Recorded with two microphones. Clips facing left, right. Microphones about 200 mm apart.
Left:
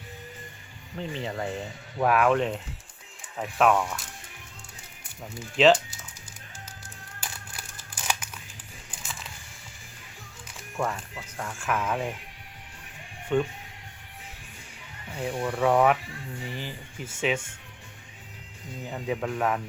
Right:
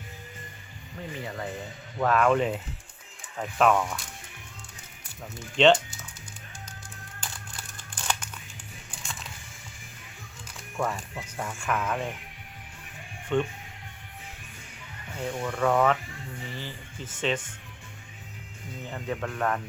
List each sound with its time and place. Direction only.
0.9 s speech: 30° left (ahead or behind)
2.0 s speech: 10° left (ahead or behind)
2.3 s speech: centre (ahead or behind)
5.6 s speech: 5° left (ahead or behind)
7.2 s crumpling: 10° left (ahead or behind)
10.8 s speech: centre (ahead or behind)
13.3 s speech: 10° left (ahead or behind)
15.1 s speech: 15° left (ahead or behind)
18.9 s speech: 10° left (ahead or behind)